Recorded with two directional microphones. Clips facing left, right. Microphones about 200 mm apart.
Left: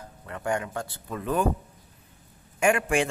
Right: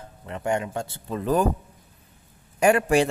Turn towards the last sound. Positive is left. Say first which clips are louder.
# right 4 dB
turn(degrees=-35)  # may be behind; listen again after turning